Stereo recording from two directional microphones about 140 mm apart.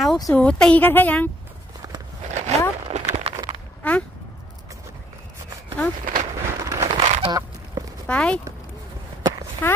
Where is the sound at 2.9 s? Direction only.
50° right (ahead or behind).